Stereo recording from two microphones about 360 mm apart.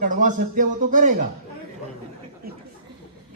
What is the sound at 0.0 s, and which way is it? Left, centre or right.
A man's voice, right.